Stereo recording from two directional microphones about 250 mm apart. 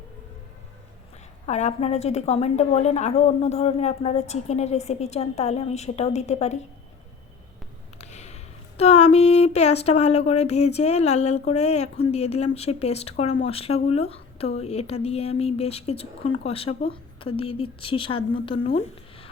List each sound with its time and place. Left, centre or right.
1.5 s a woman's voice: left
7.9 s a sound: left
8.8 s a woman's voice: left